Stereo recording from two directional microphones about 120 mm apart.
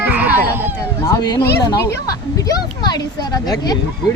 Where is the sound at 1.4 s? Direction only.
30° left (ahead or behind).